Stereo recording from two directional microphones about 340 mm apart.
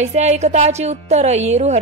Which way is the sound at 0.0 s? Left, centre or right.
Centre.